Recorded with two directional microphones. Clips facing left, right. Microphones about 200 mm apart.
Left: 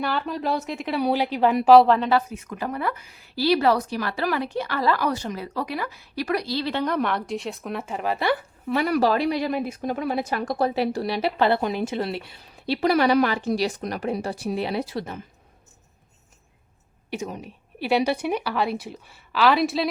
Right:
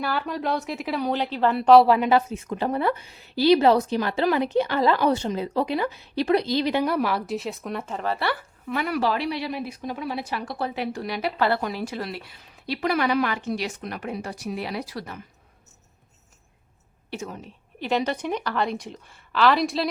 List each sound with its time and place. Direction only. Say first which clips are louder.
0.0 s speech: left 1 dB; centre (ahead or behind)
1.0 s a woman's voice: left 3 dB; 10° left (ahead or behind)
1.7 s speech: even; centre (ahead or behind)
2.0 s a woman's voice: right 2 dB; 20° right (ahead or behind); by 8.4 s 15° left (ahead or behind)
8.7 s speech: left 4 dB; 40° left (ahead or behind)
17.1 s a woman's voice: left 3 dB; 15° left (ahead or behind)